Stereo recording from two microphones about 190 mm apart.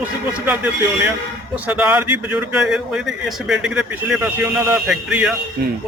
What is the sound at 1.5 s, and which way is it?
Speech, 10° right (ahead or behind).